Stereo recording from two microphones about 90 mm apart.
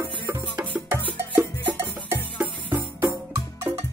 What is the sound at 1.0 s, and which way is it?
Music, 20° left (ahead or behind).